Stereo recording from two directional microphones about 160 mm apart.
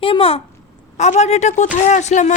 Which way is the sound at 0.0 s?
35° left (ahead or behind).